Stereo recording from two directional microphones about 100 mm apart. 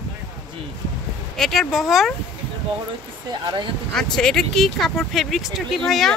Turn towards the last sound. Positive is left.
turn(degrees=0)  # may be behind; listen again after turning